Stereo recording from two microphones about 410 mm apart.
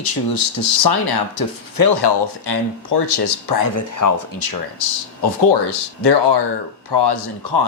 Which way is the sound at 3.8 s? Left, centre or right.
Left.